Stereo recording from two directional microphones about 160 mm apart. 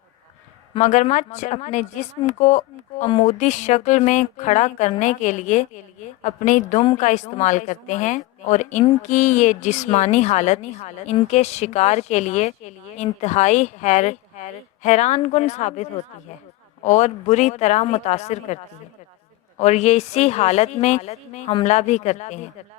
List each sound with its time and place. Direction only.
0.8 s a woman's voice: 50° left (ahead or behind)